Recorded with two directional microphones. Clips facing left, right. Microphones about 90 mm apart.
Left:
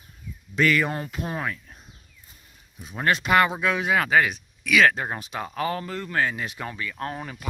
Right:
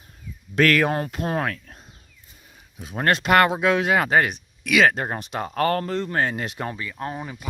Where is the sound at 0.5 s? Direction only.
75° right (ahead or behind); by 1.5 s 55° right (ahead or behind).